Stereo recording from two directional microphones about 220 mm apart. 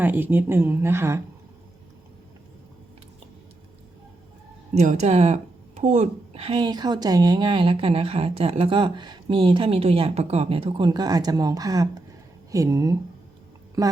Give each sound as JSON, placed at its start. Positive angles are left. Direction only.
{"t": 0.0, "sound": "a woman's voice", "side_deg": -10}
{"t": 4.7, "sound": "a woman's voice", "side_deg": -30}